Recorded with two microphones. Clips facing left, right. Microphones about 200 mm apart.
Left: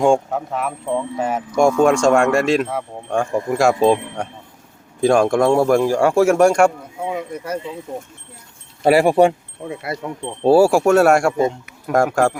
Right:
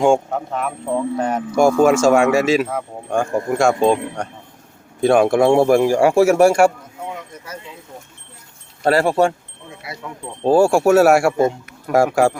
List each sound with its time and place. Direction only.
0.0 s speech: centre (ahead or behind)
7.0 s speech: 60° left (ahead or behind)
8.8 s speech: 10° left (ahead or behind)
9.6 s speech: 55° left (ahead or behind)
10.4 s speech: 5° left (ahead or behind)